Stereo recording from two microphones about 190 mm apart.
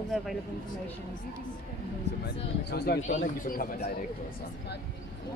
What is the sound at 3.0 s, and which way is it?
Speech, 40° left (ahead or behind).